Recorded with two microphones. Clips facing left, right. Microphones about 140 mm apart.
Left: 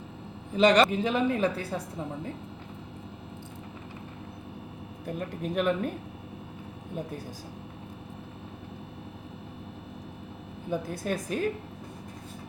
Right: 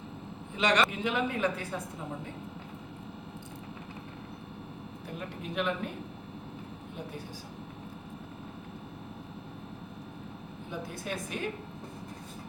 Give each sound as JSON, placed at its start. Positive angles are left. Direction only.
{"t": 0.5, "sound": "a man's voice", "side_deg": 35}
{"t": 5.0, "sound": "speech", "side_deg": 45}
{"t": 10.7, "sound": "speech", "side_deg": 45}